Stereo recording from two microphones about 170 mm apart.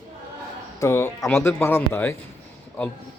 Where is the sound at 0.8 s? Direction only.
15° left (ahead or behind).